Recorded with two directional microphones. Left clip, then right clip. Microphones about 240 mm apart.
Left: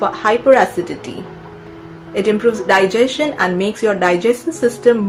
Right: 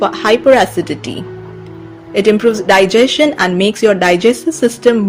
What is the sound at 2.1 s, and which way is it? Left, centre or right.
A woman's voice, right.